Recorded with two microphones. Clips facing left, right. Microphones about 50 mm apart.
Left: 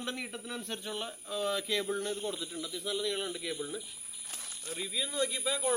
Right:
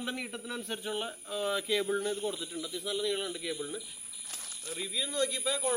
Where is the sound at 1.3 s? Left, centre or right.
Centre.